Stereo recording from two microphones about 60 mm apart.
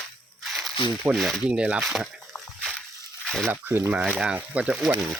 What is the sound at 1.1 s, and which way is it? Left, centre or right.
Speech, right.